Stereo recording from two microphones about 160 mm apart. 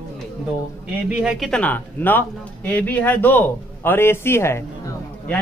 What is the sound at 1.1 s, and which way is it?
A man's voice, 5° right (ahead or behind).